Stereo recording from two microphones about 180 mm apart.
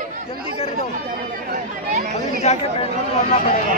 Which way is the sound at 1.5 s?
55° right (ahead or behind).